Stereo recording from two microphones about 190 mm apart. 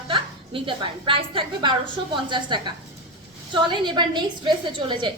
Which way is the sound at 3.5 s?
25° right (ahead or behind).